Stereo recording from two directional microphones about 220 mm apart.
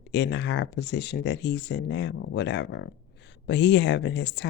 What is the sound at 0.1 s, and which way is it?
Speech, 50° left (ahead or behind).